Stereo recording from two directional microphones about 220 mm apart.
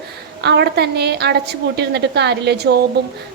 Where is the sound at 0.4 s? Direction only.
50° right (ahead or behind).